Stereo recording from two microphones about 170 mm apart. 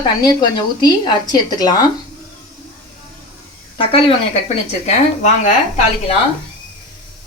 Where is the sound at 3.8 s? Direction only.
30° left (ahead or behind).